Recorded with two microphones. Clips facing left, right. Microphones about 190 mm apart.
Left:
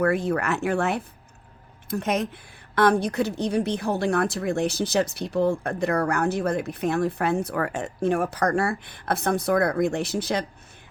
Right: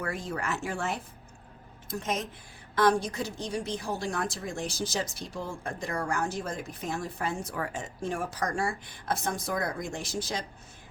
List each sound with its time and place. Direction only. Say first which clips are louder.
0.0 s a woman's voice: left 11 dB; 65° left (ahead or behind)